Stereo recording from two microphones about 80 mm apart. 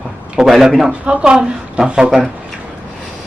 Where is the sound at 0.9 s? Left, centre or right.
Centre.